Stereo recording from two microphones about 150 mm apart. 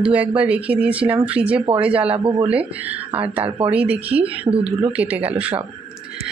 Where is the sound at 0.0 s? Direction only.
10° right (ahead or behind).